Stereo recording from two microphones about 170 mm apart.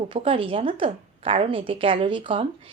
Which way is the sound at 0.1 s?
30° right (ahead or behind).